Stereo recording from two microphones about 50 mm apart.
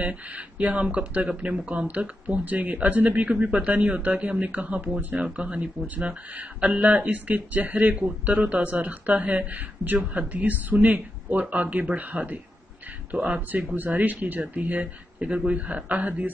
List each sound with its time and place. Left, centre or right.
0.0 s speech: right
7.7 s speech: right